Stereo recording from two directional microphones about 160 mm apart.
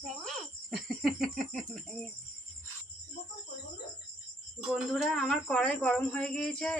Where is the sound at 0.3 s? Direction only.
Centre (ahead or behind).